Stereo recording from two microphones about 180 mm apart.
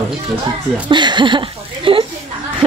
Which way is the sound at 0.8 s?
25° right (ahead or behind).